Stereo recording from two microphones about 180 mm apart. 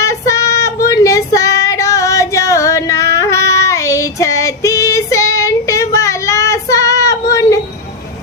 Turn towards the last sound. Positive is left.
turn(degrees=15)  # may be behind; listen again after turning